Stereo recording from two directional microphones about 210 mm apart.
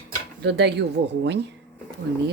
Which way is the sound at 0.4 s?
55° right (ahead or behind).